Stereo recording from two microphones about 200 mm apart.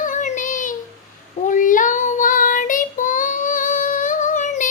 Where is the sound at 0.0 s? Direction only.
40° left (ahead or behind).